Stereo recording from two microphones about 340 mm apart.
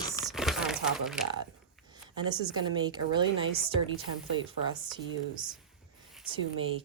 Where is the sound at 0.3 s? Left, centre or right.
Centre.